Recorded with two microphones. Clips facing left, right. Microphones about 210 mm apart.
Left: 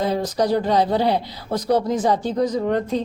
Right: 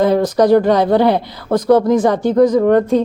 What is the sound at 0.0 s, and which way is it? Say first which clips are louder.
Speech: right 8 dB; 55° right (ahead or behind).